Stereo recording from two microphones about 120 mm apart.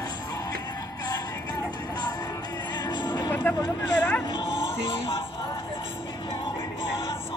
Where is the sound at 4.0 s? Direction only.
20° left (ahead or behind).